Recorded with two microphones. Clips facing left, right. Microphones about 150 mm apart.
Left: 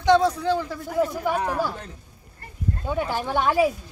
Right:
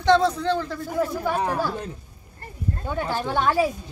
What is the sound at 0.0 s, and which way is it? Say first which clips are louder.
A man's voice: even; 10° left (ahead or behind).